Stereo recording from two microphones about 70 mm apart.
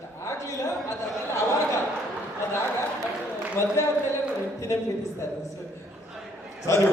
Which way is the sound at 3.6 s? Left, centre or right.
Left.